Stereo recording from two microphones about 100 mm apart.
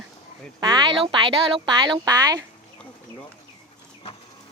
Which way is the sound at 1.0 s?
55° right (ahead or behind).